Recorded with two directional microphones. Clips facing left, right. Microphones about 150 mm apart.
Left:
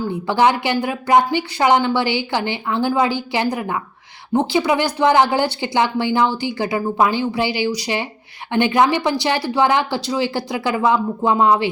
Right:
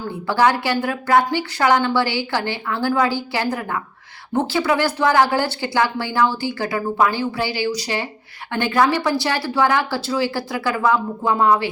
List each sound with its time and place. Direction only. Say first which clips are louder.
0.3 s speech: left 1 dB; 20° left (ahead or behind)